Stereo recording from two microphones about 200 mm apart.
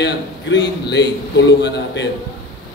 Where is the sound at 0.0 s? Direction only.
60° left (ahead or behind).